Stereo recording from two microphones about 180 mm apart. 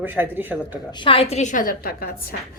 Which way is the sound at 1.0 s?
30° left (ahead or behind).